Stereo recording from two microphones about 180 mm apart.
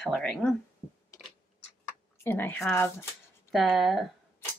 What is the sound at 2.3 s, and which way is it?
Speech, 10° left (ahead or behind).